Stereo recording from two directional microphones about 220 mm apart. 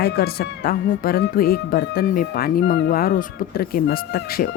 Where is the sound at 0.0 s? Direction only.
45° left (ahead or behind).